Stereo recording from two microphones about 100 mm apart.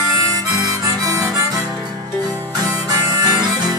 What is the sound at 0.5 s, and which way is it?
Harmonica, 40° right (ahead or behind).